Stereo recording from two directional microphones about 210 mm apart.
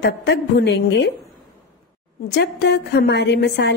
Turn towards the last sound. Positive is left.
turn(degrees=55)  # may be behind; listen again after turning